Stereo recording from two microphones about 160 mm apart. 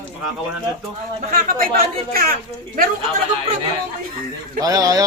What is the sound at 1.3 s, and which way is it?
Speech, 65° right (ahead or behind).